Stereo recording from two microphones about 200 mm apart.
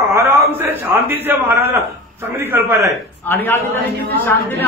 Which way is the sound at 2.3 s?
10° right (ahead or behind).